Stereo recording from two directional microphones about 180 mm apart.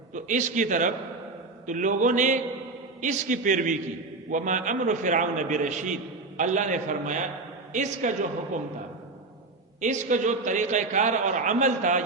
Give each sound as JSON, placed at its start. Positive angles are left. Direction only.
{"t": 0.1, "sound": "a man's voice", "side_deg": -45}
{"t": 9.8, "sound": "a man's voice", "side_deg": -45}